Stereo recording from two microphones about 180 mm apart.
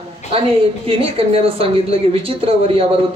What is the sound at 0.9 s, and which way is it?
Speech, 30° right (ahead or behind).